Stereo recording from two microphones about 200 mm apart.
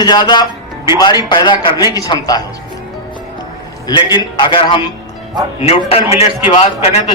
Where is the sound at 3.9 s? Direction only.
20° left (ahead or behind).